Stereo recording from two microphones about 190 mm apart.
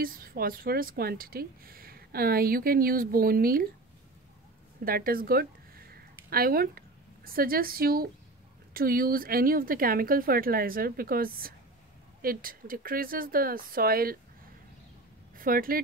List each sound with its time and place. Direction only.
0.0 s a woman's voice: 50° right (ahead or behind)
4.8 s a woman's voice: 50° right (ahead or behind)
15.3 s speech: 50° right (ahead or behind)